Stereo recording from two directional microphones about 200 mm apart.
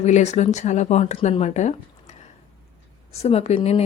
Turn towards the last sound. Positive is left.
turn(degrees=30)  # may be behind; listen again after turning